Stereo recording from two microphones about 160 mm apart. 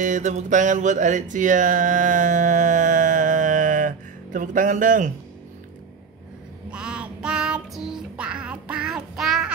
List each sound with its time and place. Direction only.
0.0 s music: 50° right (ahead or behind)
6.7 s child singing: 5° right (ahead or behind)